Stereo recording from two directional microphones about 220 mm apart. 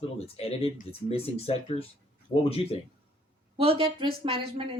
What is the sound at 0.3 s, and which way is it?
Speech, 25° left (ahead or behind).